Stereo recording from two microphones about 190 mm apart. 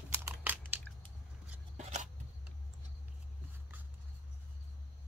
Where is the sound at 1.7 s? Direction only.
40° right (ahead or behind).